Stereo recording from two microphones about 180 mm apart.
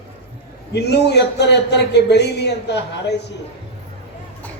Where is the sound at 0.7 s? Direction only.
70° left (ahead or behind).